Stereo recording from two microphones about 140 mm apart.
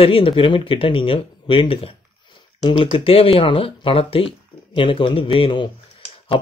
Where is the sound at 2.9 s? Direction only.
40° left (ahead or behind).